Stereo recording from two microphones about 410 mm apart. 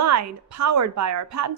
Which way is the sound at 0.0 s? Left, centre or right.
Right.